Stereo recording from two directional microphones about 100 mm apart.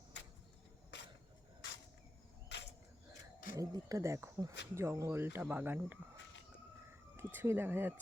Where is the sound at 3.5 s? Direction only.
35° right (ahead or behind); by 5.9 s 20° right (ahead or behind).